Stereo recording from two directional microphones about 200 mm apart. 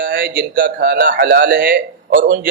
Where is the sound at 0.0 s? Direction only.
45° right (ahead or behind).